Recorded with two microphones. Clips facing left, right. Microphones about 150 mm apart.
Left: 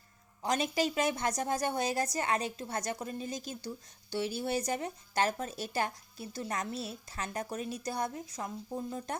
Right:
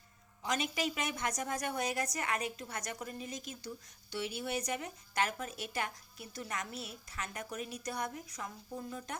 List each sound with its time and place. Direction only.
0.4 s a woman's voice: 35° left (ahead or behind)